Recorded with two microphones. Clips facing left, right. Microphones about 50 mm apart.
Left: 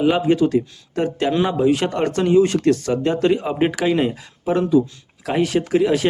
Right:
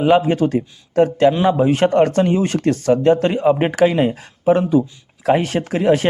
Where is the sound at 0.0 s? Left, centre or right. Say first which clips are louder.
Right 2 dB; right.